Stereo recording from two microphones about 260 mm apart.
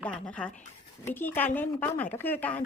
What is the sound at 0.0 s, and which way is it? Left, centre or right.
Speech, centre.